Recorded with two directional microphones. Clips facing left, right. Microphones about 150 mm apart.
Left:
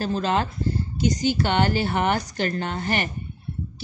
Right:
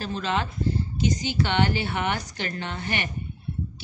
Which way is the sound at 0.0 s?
40° left (ahead or behind).